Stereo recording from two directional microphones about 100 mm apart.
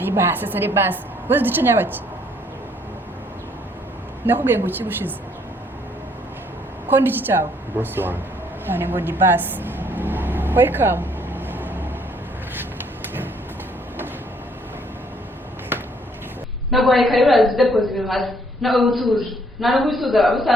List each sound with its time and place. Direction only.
0.0 s a woman's voice: 20° right (ahead or behind)
4.3 s a woman's voice: 20° right (ahead or behind)
6.8 s a woman's voice: 20° right (ahead or behind)
8.6 s vehicle: 20° right (ahead or behind)
15.7 s a sound: 20° right (ahead or behind)
16.7 s a woman's voice: centre (ahead or behind)